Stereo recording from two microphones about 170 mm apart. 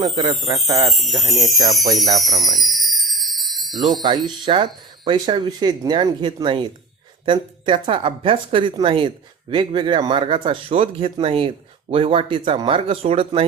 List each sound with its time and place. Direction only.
0.2 s speech: 25° right (ahead or behind)
0.8 s speech: centre (ahead or behind)
2.4 s jingle bell: centre (ahead or behind)
4.0 s speech: 25° right (ahead or behind)